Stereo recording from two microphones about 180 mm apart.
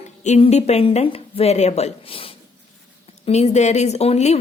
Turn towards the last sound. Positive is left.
turn(degrees=35)  # may be behind; listen again after turning